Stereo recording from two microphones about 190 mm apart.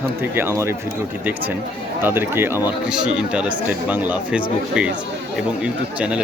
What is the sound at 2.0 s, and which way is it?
Speech, 10° right (ahead or behind).